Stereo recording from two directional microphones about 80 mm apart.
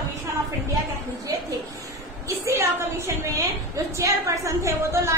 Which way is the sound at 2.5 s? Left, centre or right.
Right.